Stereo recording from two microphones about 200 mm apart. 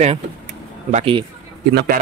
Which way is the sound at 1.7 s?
55° right (ahead or behind).